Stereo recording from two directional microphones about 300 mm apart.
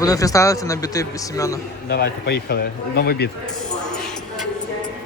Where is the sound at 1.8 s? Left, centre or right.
Left.